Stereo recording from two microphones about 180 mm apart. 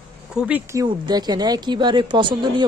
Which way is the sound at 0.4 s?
10° right (ahead or behind).